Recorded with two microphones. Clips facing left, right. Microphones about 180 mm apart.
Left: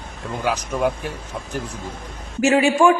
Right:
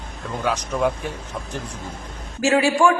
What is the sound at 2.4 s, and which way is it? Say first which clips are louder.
Speech: left 2 dB; 20° left (ahead or behind).